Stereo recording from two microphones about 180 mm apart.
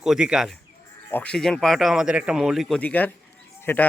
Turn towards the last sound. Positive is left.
turn(degrees=10)  # may be behind; listen again after turning